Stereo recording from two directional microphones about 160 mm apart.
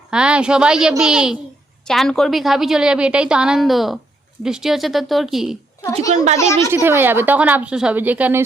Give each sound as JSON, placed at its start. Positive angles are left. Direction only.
{"t": 0.1, "sound": "a woman's voice", "side_deg": -5}
{"t": 6.3, "sound": "a woman's voice", "side_deg": 20}
{"t": 6.7, "sound": "a woman's voice", "side_deg": -15}